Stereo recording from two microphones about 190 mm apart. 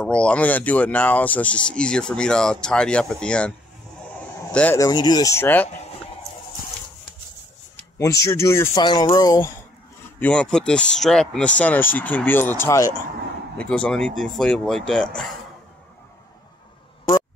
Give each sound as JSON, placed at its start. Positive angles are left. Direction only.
{"t": 0.0, "sound": "speech", "side_deg": 5}
{"t": 4.7, "sound": "speech", "side_deg": 20}
{"t": 8.0, "sound": "speech", "side_deg": 15}
{"t": 10.2, "sound": "speech", "side_deg": 5}